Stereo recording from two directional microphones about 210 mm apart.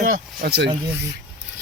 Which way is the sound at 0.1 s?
45° right (ahead or behind).